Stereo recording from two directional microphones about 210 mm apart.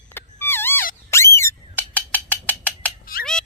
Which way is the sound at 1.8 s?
5° left (ahead or behind).